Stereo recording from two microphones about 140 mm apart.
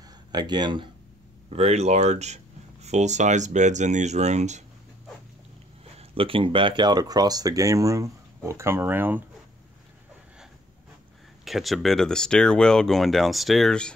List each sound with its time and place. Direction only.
0.3 s speech: 30° right (ahead or behind)
1.5 s speech: 50° right (ahead or behind)
5.9 s speech: 40° right (ahead or behind); by 9.2 s 15° right (ahead or behind)
11.4 s speech: centre (ahead or behind)